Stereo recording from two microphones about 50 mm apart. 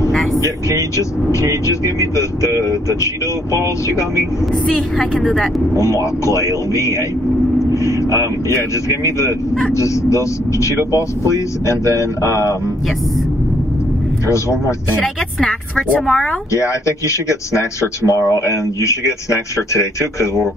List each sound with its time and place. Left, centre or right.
0.1 s vehicle: centre
0.7 s speech: left
4.6 s speech: centre
5.8 s speech: left
7.7 s vehicle: left
8.5 s speech: left
14.2 s speech: left
15.4 s speech: centre
16.5 s speech: left